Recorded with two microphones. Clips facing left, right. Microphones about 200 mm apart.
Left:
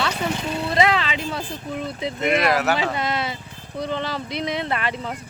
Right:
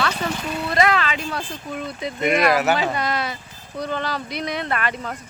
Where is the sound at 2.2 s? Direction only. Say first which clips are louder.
Right 2 dB; centre (ahead or behind).